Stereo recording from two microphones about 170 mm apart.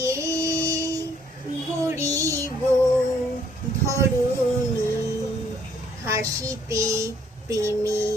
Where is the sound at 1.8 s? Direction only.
20° right (ahead or behind).